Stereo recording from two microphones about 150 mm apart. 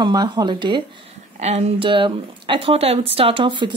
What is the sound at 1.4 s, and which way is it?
Speech, 45° right (ahead or behind).